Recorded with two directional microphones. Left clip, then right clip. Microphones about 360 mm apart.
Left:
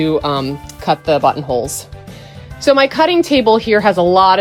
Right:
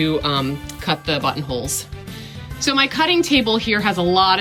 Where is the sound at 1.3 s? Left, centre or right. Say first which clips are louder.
Left 8 dB; centre.